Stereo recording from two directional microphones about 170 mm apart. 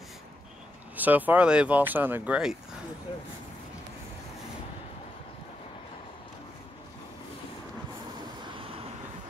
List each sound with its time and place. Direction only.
0.9 s speech: 10° right (ahead or behind)
3.1 s speech: 30° left (ahead or behind)